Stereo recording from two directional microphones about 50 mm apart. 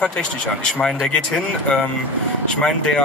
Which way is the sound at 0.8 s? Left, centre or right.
Centre.